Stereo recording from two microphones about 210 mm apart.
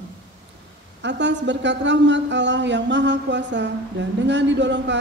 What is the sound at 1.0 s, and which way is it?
A woman's voice, 60° right (ahead or behind).